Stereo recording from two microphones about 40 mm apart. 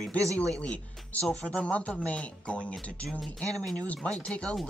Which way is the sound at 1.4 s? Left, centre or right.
Left.